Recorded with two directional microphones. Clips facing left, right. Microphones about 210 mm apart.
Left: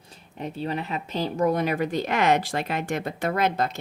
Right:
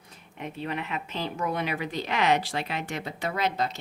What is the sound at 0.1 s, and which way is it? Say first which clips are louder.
Speech: left 4 dB; 35° left (ahead or behind).